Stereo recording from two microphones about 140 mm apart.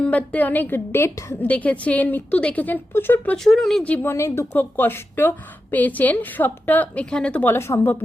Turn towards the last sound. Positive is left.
turn(degrees=20)  # may be behind; listen again after turning